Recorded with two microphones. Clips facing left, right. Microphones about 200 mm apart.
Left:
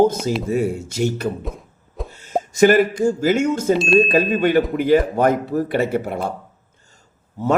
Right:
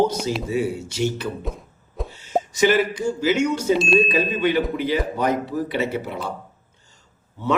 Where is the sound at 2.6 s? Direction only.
50° left (ahead or behind).